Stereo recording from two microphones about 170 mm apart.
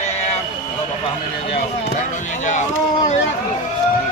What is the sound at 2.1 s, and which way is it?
Speech, 45° left (ahead or behind).